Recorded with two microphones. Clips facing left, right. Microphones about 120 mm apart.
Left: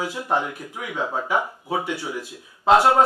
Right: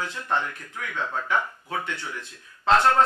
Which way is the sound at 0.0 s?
10° left (ahead or behind).